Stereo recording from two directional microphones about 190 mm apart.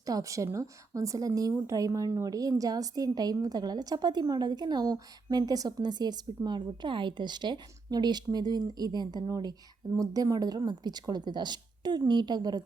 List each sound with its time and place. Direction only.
0.0 s a woman's voice: 15° right (ahead or behind)